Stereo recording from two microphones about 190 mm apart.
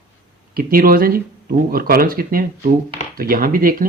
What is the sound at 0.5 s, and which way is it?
Speech, 50° right (ahead or behind).